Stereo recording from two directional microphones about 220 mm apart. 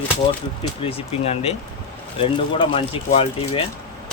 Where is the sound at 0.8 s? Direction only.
25° left (ahead or behind).